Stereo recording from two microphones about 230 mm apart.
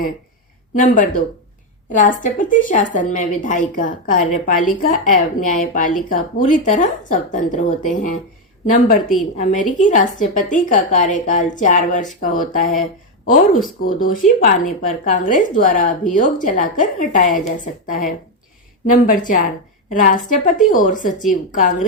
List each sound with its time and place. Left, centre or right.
0.7 s a woman's voice: left